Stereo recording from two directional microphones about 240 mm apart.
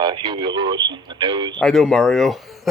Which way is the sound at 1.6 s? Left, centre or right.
Centre.